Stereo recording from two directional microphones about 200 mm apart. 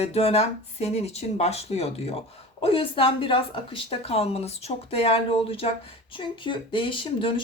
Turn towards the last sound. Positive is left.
turn(degrees=25)  # may be behind; listen again after turning